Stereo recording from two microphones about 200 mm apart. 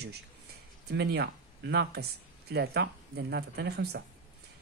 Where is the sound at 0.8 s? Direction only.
55° right (ahead or behind).